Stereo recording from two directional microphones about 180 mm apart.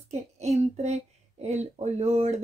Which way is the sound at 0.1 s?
40° right (ahead or behind).